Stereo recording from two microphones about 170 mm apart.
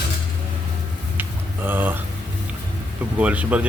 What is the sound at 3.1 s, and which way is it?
Speech, 10° right (ahead or behind).